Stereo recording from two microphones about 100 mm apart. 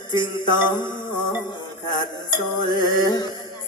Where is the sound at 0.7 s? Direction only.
50° left (ahead or behind).